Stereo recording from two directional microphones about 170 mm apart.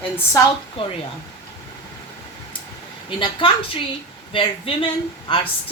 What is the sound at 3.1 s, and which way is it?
A woman's voice, 30° left (ahead or behind).